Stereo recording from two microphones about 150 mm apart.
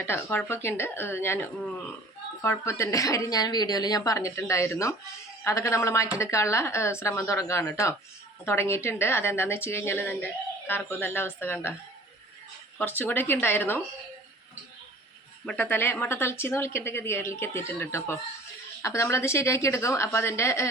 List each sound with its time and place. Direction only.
0.1 s a woman's voice: 15° left (ahead or behind)
12.8 s a woman's voice: 10° left (ahead or behind)
15.7 s a woman's voice: 15° left (ahead or behind)